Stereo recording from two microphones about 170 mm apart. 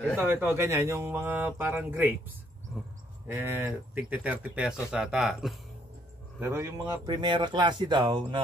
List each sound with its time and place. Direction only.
0.1 s speech: 10° right (ahead or behind)
3.3 s speech: 15° right (ahead or behind)
6.4 s speech: 15° right (ahead or behind)
7.2 s speech: 25° right (ahead or behind)